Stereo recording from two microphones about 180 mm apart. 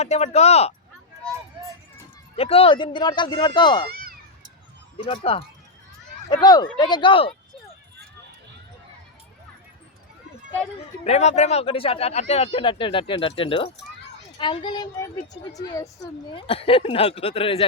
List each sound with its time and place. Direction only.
0.0 s speech: 35° left (ahead or behind)
2.3 s speech: 30° left (ahead or behind)
3.8 s cat: 55° right (ahead or behind)
5.0 s speech: 30° left (ahead or behind)
11.0 s speech: 40° left (ahead or behind)
16.3 s speech: 30° left (ahead or behind)